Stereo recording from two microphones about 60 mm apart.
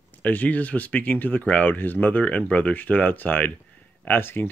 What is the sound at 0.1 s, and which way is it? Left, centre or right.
Speech, left.